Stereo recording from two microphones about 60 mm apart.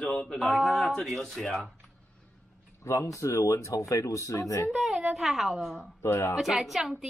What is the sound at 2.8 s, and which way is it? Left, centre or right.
Speech, left.